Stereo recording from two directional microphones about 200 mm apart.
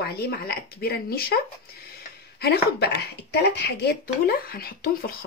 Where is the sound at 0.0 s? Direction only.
50° left (ahead or behind).